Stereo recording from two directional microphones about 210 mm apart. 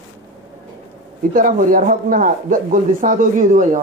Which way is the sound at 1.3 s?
40° right (ahead or behind).